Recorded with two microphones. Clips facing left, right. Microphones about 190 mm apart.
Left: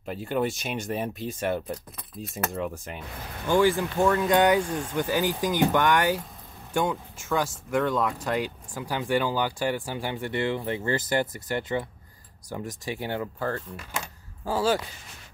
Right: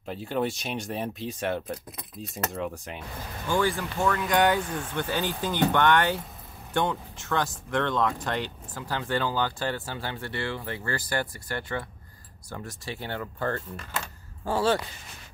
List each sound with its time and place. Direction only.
0.0 s speech: centre (ahead or behind)
2.3 s speech: centre (ahead or behind)
3.4 s speech: 15° left (ahead or behind)